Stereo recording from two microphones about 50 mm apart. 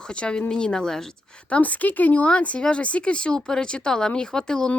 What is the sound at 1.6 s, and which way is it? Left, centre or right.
A woman's voice, left.